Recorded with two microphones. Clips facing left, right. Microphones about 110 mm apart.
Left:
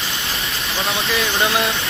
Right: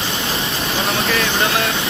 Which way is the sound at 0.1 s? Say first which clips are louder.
Right 4 dB; 30° right (ahead or behind).